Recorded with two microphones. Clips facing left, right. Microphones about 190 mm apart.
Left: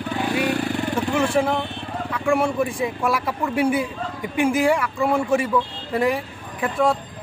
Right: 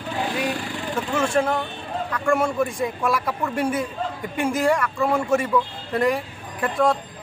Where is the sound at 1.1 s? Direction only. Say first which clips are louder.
Even; 10° left (ahead or behind).